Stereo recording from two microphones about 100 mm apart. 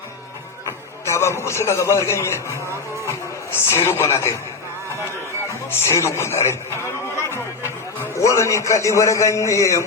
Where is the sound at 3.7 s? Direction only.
25° left (ahead or behind).